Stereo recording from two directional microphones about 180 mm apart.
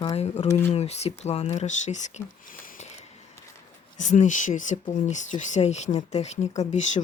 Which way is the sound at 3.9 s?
45° left (ahead or behind).